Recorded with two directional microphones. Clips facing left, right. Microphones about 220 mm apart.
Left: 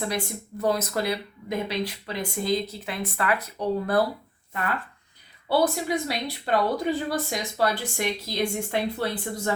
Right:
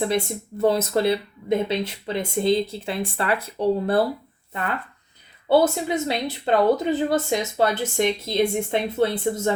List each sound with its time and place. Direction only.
0.6 s speech: 25° right (ahead or behind)
5.5 s speech: 25° right (ahead or behind)